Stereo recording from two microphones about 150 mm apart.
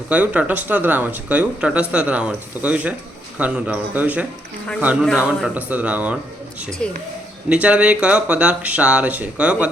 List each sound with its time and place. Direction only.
0.1 s speech: 10° right (ahead or behind)
6.8 s speech: 5° left (ahead or behind)
7.5 s speech: 10° right (ahead or behind)